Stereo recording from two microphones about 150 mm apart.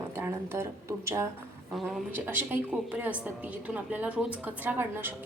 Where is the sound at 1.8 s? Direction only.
Centre (ahead or behind).